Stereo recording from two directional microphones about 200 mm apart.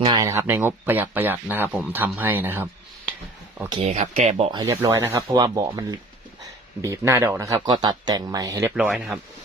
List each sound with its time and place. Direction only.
0.0 s speech: 20° right (ahead or behind)
3.7 s speech: 30° right (ahead or behind)
4.6 s speech: 15° right (ahead or behind)
8.7 s speech: 5° right (ahead or behind)